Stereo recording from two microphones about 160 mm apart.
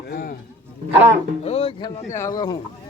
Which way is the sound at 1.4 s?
40° left (ahead or behind).